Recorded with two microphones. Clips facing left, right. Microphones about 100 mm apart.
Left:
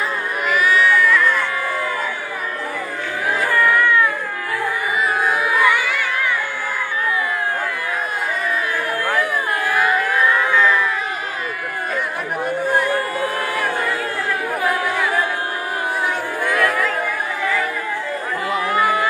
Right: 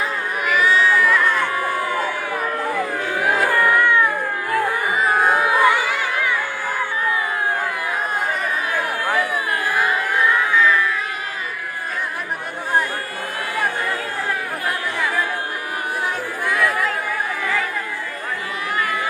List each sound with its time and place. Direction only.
0.6 s baby cry: 25° right (ahead or behind)
3.2 s music: 55° right (ahead or behind)
3.6 s cat: 15° right (ahead or behind)
4.5 s music: 40° right (ahead or behind); by 6.1 s 25° right (ahead or behind)